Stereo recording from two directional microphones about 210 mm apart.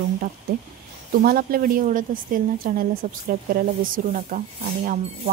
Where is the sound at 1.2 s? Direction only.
45° right (ahead or behind).